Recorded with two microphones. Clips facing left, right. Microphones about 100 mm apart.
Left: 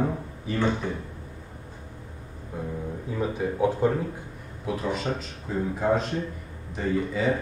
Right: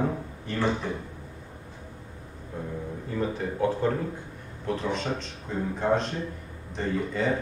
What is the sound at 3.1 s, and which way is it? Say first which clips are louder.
A man's voice: left 1 dB; 10° left (ahead or behind).